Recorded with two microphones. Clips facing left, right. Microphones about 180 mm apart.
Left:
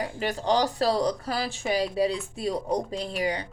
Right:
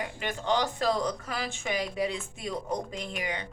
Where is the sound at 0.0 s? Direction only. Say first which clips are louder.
Left 5 dB; 35° left (ahead or behind).